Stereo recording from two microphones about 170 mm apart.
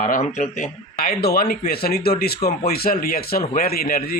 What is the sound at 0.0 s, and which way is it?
Speech, 50° left (ahead or behind).